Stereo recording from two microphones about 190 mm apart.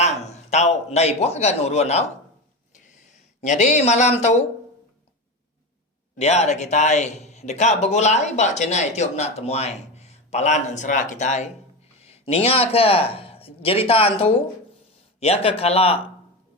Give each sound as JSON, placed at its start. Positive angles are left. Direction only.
{"t": 0.0, "sound": "a man's voice", "side_deg": 35}
{"t": 2.7, "sound": "a sound", "side_deg": 40}
{"t": 6.1, "sound": "a man's voice", "side_deg": 35}